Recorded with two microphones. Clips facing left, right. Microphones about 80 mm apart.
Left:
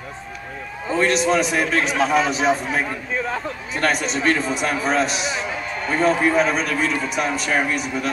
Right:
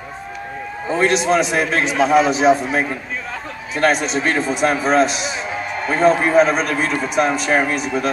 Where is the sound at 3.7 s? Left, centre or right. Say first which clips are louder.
Right 5 dB; centre.